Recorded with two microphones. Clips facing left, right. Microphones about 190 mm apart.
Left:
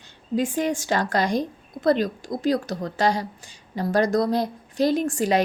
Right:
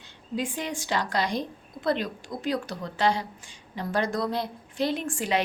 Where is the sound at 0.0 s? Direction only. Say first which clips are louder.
Left 6 dB; 45° left (ahead or behind).